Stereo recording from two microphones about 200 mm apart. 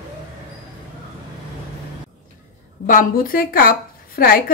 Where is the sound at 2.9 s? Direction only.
45° left (ahead or behind).